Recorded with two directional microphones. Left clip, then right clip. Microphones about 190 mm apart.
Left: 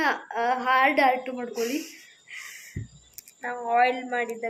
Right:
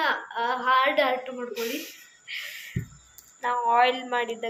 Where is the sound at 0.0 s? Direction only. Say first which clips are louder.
Left 1 dB; 65° left (ahead or behind).